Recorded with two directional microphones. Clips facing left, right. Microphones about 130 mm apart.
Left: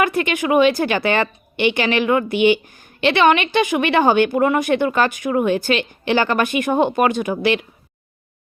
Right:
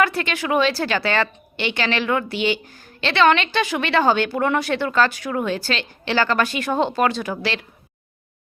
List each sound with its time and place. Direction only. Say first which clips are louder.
0.0 s a woman's voice: left 2 dB; 15° left (ahead or behind)